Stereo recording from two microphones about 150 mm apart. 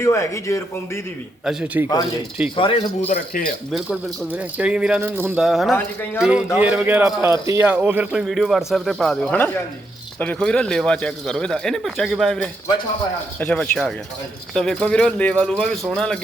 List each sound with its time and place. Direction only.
0.0 s speech: 20° left (ahead or behind)
1.5 s speech: 5° right (ahead or behind)
2.6 s speech: 40° left (ahead or behind)
3.7 s speech: 5° right (ahead or behind)
5.4 s a man's voice: 5° right (ahead or behind)